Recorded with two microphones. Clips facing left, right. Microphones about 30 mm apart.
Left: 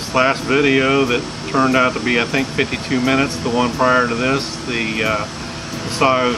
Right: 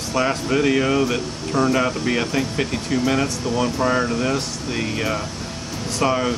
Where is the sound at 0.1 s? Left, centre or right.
Left.